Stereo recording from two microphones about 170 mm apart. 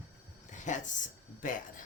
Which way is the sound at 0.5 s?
45° left (ahead or behind).